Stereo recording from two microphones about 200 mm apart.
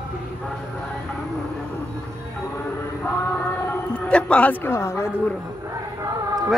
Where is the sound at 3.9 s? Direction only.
5° left (ahead or behind).